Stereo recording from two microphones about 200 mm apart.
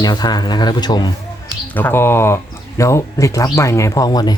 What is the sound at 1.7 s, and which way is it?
Speech, 10° left (ahead or behind).